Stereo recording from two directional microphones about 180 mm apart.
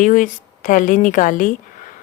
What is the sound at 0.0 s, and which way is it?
Speech, 50° left (ahead or behind).